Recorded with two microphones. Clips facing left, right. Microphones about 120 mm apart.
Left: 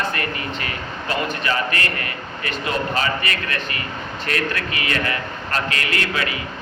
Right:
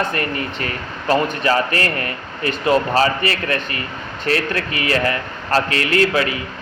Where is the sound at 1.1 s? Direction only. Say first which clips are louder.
Right 7 dB; 35° right (ahead or behind).